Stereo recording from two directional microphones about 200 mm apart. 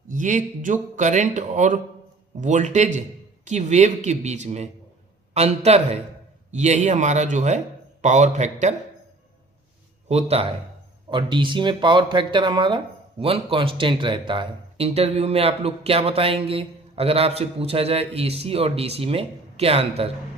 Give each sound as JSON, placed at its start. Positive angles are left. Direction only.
{"t": 0.1, "sound": "speech", "side_deg": -40}
{"t": 10.1, "sound": "speech", "side_deg": -30}